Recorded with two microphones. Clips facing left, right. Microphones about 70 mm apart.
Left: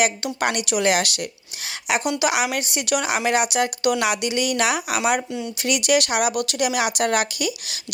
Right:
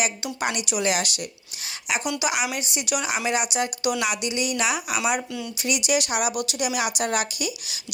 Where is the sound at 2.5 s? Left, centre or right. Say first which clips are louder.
Left 4 dB; left.